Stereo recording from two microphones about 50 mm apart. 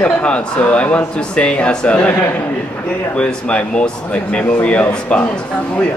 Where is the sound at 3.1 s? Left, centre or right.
Left.